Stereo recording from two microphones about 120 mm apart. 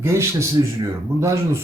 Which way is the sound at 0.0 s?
25° right (ahead or behind).